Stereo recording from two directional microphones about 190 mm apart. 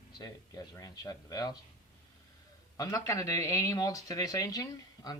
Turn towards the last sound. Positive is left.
turn(degrees=20)  # may be behind; listen again after turning